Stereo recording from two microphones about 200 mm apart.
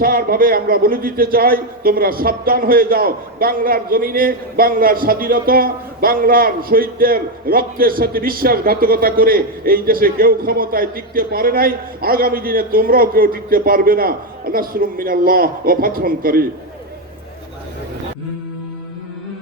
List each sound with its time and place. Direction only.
0.0 s a man's voice: 50° right (ahead or behind)